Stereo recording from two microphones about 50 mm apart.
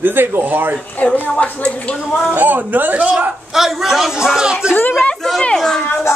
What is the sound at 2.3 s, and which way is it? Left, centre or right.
Speech, right.